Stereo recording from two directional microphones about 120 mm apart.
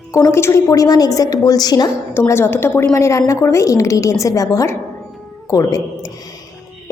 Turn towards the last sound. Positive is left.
turn(degrees=30)  # may be behind; listen again after turning